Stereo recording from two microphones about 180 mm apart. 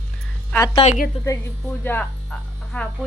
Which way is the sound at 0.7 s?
40° left (ahead or behind).